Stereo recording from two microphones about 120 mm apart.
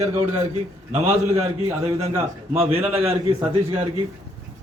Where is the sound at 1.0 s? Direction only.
55° right (ahead or behind).